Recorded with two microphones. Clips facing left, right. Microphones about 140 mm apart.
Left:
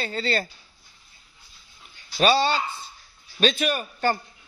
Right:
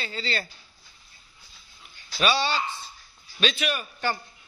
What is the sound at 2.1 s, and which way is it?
Speech, 40° left (ahead or behind).